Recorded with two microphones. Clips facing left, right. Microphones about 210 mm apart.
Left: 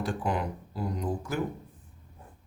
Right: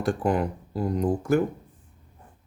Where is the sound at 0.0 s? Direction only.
45° right (ahead or behind).